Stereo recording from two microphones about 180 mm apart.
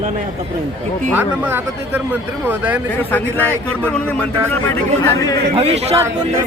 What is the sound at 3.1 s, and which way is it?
Speech, 10° left (ahead or behind).